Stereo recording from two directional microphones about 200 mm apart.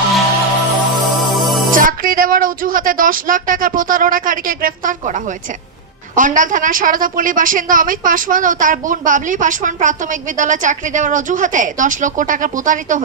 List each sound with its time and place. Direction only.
0.9 s music: centre (ahead or behind)
1.7 s speech: 45° right (ahead or behind)
6.1 s a woman's voice: 40° right (ahead or behind)